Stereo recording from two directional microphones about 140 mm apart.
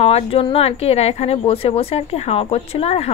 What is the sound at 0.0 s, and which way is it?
A woman's voice, 45° left (ahead or behind).